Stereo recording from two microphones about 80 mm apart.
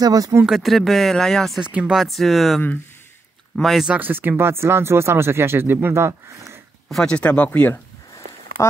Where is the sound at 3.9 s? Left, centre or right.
Right.